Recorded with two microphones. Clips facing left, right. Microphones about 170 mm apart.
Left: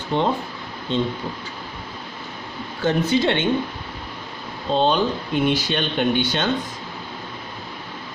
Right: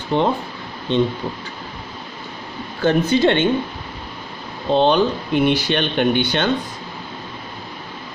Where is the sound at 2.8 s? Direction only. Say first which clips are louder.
Right 4 dB; 60° right (ahead or behind).